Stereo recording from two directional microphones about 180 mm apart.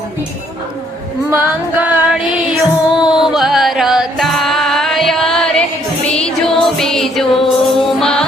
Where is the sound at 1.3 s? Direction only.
10° right (ahead or behind).